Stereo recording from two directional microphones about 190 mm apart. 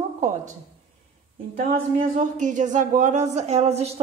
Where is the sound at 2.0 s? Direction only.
40° right (ahead or behind).